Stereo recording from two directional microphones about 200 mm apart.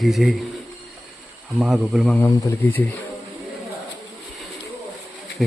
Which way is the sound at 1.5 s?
Centre (ahead or behind).